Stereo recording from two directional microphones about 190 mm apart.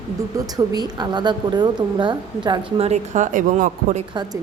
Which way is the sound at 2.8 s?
35° right (ahead or behind).